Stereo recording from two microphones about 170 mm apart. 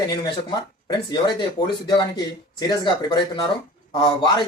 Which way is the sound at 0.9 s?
25° left (ahead or behind).